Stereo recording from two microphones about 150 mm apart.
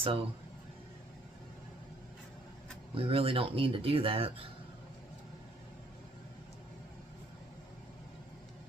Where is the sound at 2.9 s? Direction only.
40° right (ahead or behind).